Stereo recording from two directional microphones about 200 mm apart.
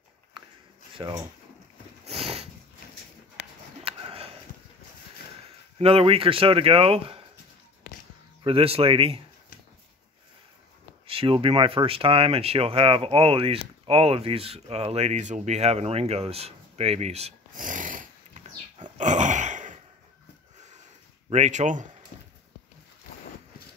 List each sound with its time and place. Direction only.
0.9 s speech: 25° right (ahead or behind)
2.0 s a sound: 30° right (ahead or behind)
3.8 s sniff: 30° right (ahead or behind)
5.8 s speech: 30° right (ahead or behind)
8.5 s speech: 30° right (ahead or behind)
11.1 s speech: 25° right (ahead or behind)
18.9 s sigh: 40° right (ahead or behind)
21.3 s speech: 35° right (ahead or behind)